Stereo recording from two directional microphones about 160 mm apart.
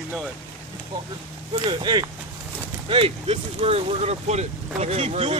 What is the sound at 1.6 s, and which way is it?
Speech, 30° right (ahead or behind).